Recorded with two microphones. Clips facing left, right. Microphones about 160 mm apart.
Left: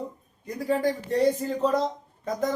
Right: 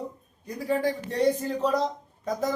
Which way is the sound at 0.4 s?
Centre (ahead or behind).